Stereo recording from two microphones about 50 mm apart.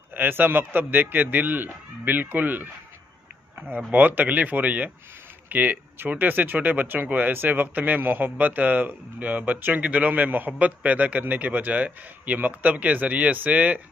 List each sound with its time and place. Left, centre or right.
0.1 s a man's voice: right
3.7 s a man's voice: right